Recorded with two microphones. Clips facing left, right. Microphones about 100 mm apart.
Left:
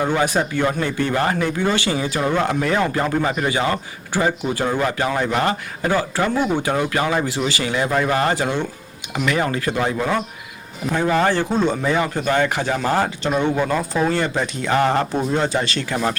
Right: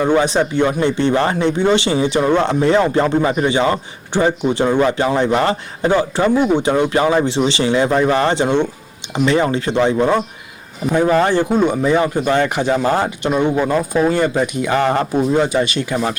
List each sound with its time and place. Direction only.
0.1 s speech: 20° right (ahead or behind)
10.8 s speech: 10° right (ahead or behind)